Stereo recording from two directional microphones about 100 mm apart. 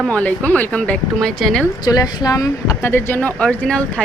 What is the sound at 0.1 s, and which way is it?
A woman's voice, 15° left (ahead or behind).